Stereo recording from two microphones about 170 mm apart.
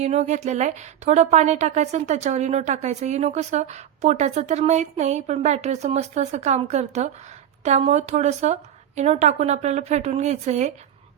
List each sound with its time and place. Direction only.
0.0 s a woman's voice: 40° right (ahead or behind)